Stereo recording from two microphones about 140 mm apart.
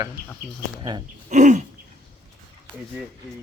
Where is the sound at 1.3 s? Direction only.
60° right (ahead or behind).